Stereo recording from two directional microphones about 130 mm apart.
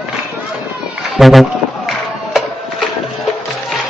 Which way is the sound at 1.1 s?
Centre (ahead or behind).